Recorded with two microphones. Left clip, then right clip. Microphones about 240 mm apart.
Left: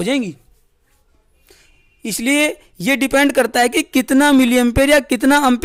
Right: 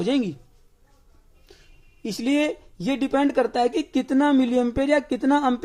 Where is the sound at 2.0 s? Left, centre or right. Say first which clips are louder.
Left 7 dB; left.